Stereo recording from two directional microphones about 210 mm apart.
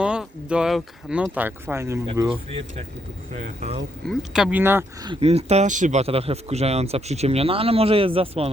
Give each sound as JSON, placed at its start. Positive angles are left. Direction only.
{"t": 0.0, "sound": "speech", "side_deg": -5}
{"t": 2.3, "sound": "speech", "side_deg": -25}
{"t": 4.0, "sound": "speech", "side_deg": 0}
{"t": 5.0, "sound": "speech", "side_deg": -30}